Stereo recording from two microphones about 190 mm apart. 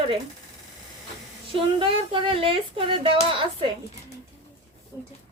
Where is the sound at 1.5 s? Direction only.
25° right (ahead or behind).